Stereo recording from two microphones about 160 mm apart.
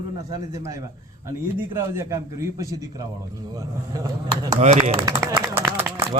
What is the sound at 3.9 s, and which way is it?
Speech, 25° right (ahead or behind).